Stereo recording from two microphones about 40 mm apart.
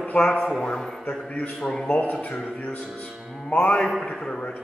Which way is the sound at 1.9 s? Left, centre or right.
Left.